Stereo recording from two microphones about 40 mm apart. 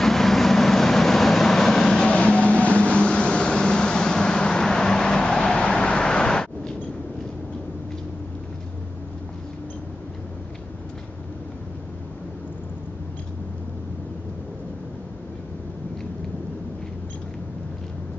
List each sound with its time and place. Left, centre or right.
0.0 s vehicle: centre
2.0 s vehicle: left